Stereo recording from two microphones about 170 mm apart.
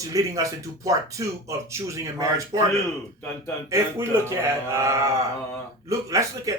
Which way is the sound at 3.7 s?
15° right (ahead or behind).